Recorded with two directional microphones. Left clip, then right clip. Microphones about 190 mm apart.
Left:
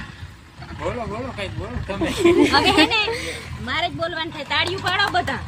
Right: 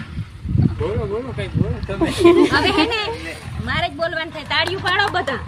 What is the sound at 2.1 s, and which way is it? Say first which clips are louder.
Speech: right 2 dB; 25° right (ahead or behind).